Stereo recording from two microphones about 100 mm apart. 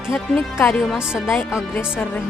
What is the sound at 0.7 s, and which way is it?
Speech, centre (ahead or behind).